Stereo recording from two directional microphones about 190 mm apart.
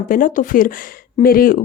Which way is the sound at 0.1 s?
45° left (ahead or behind).